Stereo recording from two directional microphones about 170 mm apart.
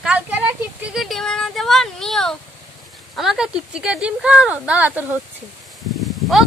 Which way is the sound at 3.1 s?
5° right (ahead or behind).